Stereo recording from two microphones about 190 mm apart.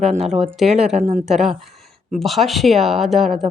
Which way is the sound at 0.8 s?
5° right (ahead or behind).